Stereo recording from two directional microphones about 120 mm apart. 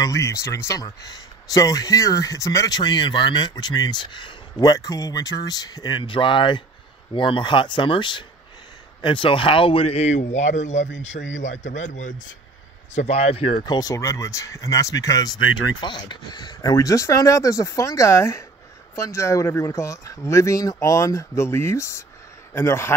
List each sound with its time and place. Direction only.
0.0 s speech: 25° left (ahead or behind); by 11.1 s 75° left (ahead or behind)
11.6 s speech: 90° left
12.9 s speech: 65° left (ahead or behind)
13.7 s speech: 30° left (ahead or behind)
15.8 s a man's voice: 40° left (ahead or behind); by 22.9 s 20° left (ahead or behind)